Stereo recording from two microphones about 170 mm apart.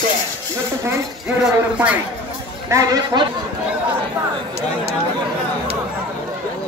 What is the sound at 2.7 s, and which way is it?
Speech, 20° right (ahead or behind).